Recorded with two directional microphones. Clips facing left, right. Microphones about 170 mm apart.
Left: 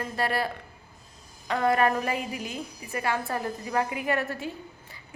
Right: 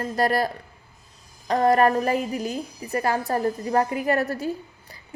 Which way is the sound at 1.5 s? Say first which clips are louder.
Right 5 dB; 40° right (ahead or behind).